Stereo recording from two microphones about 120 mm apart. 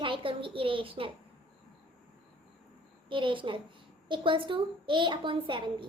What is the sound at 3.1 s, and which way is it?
A woman's voice, 45° right (ahead or behind).